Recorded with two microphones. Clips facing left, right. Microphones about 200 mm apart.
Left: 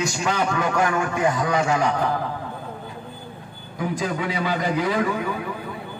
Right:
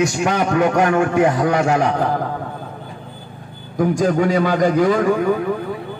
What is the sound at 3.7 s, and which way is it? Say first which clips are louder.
A man's voice: right 9 dB; 45° right (ahead or behind).